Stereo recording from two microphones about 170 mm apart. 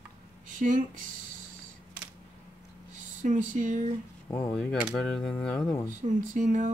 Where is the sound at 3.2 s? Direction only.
50° right (ahead or behind).